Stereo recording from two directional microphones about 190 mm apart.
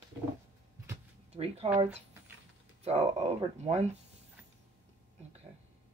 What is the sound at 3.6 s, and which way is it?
Speech, 35° right (ahead or behind).